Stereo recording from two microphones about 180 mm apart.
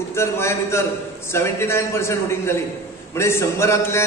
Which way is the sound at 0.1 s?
15° left (ahead or behind).